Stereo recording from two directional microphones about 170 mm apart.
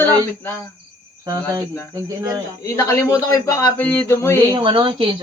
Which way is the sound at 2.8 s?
15° left (ahead or behind).